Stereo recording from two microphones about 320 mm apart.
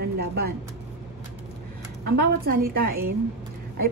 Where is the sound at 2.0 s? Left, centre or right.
Right.